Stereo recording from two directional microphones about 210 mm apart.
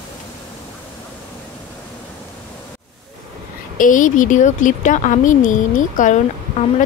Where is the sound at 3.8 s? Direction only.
40° left (ahead or behind).